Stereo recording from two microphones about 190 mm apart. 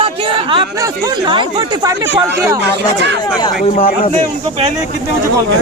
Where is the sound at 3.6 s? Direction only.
50° left (ahead or behind).